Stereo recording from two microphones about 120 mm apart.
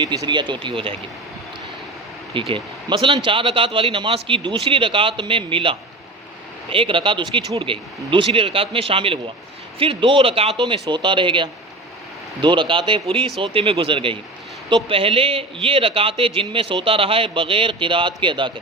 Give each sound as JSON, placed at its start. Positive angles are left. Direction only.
{"t": 0.0, "sound": "speech", "side_deg": -40}
{"t": 2.3, "sound": "a man's voice", "side_deg": -45}